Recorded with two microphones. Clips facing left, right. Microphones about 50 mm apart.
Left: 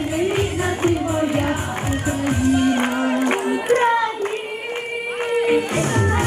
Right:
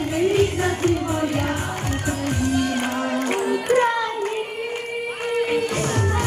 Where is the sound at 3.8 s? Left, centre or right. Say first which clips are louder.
Left 3 dB; centre.